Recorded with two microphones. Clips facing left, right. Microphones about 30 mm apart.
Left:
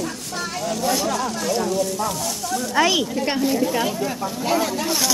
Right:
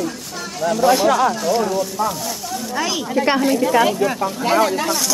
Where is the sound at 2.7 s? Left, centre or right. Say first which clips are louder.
Left 4 dB; left.